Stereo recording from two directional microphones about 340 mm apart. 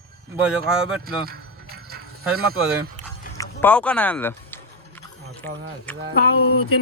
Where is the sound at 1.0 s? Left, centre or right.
Right.